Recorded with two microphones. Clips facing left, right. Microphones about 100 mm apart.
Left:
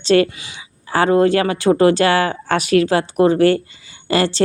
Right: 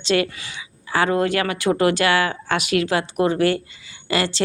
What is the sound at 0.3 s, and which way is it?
Speech, 20° left (ahead or behind).